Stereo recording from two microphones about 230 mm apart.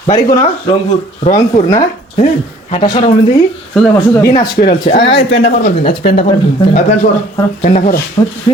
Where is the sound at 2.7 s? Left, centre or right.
Left.